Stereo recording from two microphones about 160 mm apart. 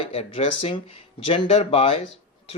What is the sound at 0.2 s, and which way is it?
Speech, 40° left (ahead or behind).